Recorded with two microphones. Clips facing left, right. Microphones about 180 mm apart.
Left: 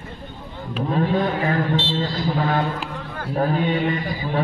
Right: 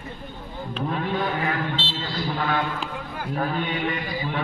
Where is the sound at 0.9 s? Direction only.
35° left (ahead or behind).